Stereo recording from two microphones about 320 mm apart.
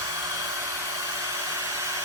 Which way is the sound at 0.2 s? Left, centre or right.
Centre.